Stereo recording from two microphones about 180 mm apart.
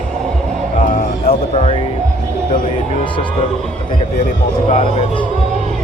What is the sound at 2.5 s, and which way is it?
Music, 50° left (ahead or behind).